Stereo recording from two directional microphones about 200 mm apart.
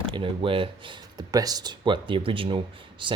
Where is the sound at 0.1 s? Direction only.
25° right (ahead or behind).